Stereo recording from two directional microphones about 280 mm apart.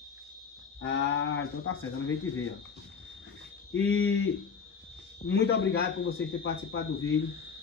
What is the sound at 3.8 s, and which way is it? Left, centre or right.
A man's voice, left.